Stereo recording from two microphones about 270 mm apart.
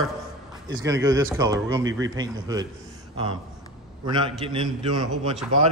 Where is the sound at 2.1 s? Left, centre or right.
Centre.